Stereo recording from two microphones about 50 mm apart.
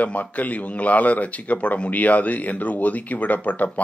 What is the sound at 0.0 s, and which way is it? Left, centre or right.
A man's voice, left.